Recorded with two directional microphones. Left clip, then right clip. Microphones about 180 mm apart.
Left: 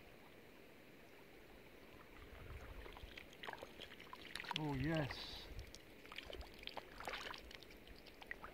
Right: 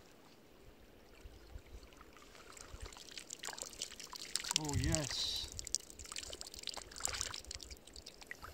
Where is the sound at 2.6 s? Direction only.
5° left (ahead or behind).